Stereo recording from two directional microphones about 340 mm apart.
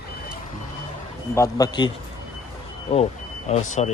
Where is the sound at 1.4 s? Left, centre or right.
Centre.